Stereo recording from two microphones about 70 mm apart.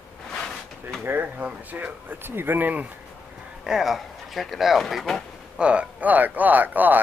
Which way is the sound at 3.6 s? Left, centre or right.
Centre.